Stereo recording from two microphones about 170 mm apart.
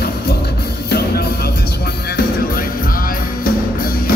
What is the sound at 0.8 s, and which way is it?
Music, 70° left (ahead or behind).